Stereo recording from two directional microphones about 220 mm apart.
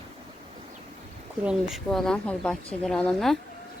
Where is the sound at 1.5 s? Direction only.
Centre (ahead or behind).